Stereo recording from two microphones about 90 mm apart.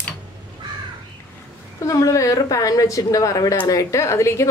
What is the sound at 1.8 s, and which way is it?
A woman's voice, 40° left (ahead or behind).